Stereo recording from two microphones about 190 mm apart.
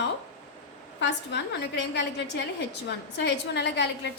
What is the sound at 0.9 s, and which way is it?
A woman's voice, 65° left (ahead or behind).